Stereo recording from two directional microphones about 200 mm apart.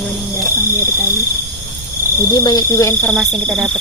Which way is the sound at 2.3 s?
20° left (ahead or behind).